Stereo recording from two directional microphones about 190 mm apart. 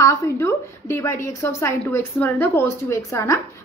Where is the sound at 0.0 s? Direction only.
15° left (ahead or behind).